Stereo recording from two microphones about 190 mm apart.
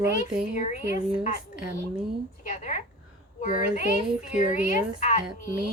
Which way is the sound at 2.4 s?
40° left (ahead or behind).